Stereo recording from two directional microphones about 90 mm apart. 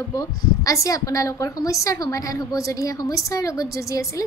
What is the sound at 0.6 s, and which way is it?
A woman's voice, 40° left (ahead or behind).